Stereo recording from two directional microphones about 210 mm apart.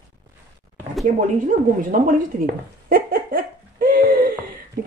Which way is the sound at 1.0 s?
40° right (ahead or behind).